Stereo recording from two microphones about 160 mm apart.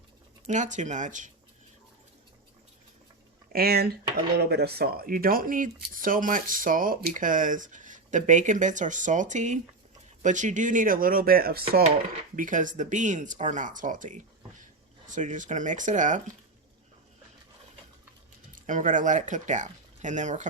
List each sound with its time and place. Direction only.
0.4 s speech: 50° right (ahead or behind)
3.5 s speech: 70° right (ahead or behind)
4.4 s speech: 85° right
12.4 s speech: 55° right (ahead or behind)
18.5 s speech: 55° right (ahead or behind)